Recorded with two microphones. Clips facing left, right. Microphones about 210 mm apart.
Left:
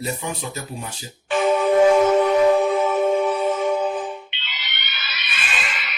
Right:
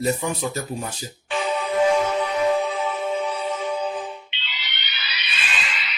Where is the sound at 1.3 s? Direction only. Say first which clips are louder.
Left 7 dB; 50° left (ahead or behind).